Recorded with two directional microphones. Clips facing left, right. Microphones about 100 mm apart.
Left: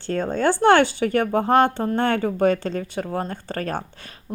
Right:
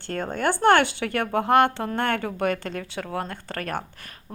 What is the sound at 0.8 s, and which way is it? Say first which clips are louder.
Speech: left 5 dB; 65° right (ahead or behind).